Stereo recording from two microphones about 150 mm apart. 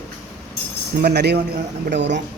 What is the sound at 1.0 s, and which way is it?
Speech, 90° right.